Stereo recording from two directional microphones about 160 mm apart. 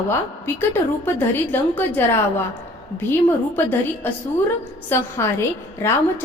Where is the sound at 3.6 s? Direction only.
10° left (ahead or behind).